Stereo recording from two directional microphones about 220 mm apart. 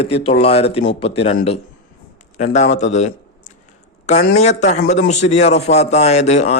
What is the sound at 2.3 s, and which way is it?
A man's voice, 30° left (ahead or behind).